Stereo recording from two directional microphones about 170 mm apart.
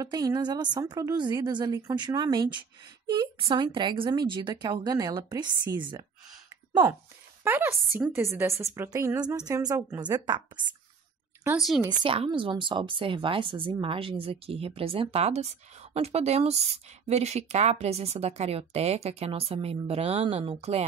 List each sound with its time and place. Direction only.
0.0 s speech: 25° right (ahead or behind)
7.4 s a woman's voice: 10° right (ahead or behind)
11.5 s speech: centre (ahead or behind)
12.0 s speech: 35° right (ahead or behind)